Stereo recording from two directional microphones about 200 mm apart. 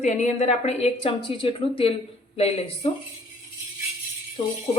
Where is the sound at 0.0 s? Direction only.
35° left (ahead or behind).